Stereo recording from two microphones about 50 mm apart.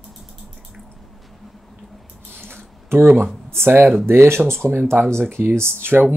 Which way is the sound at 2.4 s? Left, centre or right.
Right.